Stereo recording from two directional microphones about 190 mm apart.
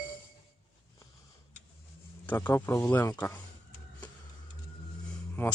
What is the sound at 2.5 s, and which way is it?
Speech, 10° left (ahead or behind).